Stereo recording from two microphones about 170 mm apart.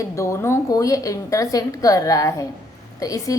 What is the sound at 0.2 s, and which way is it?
A woman's voice, 20° left (ahead or behind).